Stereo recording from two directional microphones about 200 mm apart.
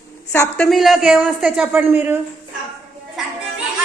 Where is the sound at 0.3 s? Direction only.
5° left (ahead or behind).